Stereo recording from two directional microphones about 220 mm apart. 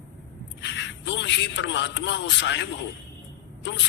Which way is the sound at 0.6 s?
55° left (ahead or behind).